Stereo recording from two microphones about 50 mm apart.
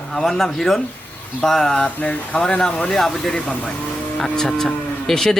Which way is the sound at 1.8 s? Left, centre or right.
Left.